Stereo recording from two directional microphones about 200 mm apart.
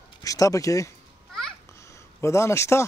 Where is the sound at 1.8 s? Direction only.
15° left (ahead or behind).